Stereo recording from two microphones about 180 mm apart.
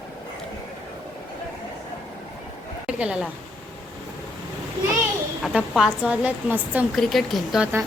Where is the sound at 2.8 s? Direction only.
5° right (ahead or behind).